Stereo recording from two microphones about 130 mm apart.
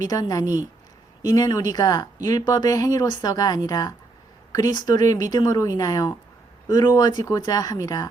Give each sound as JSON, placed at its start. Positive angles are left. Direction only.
{"t": 0.1, "sound": "speech", "side_deg": 30}